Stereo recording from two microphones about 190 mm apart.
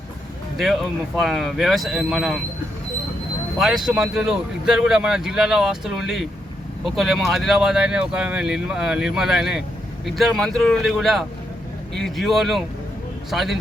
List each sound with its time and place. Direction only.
0.6 s speech: centre (ahead or behind)
3.6 s speech: centre (ahead or behind)